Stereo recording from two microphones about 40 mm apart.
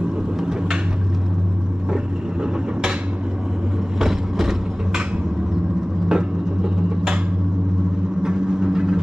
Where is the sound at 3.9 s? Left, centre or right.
Centre.